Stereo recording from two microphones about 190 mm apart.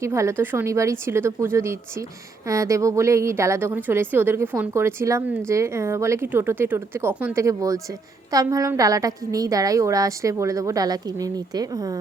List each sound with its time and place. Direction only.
0.0 s a woman's voice: 15° right (ahead or behind)